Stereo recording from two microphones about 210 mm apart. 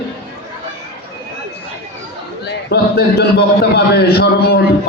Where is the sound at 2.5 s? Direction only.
50° left (ahead or behind).